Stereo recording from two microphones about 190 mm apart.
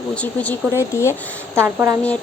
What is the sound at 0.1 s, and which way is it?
Speech, 5° left (ahead or behind).